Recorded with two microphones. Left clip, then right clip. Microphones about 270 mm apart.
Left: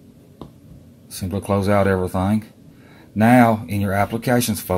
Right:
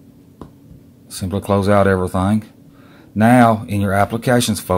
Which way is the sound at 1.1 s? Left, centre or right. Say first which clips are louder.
Right 4 dB; centre.